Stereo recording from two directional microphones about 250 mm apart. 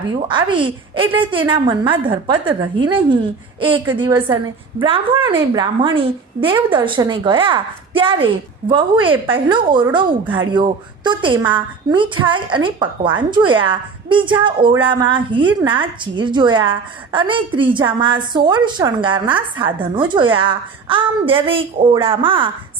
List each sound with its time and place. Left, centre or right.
0.1 s a woman's voice: centre